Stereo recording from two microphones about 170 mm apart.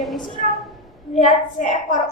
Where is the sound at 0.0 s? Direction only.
Centre (ahead or behind).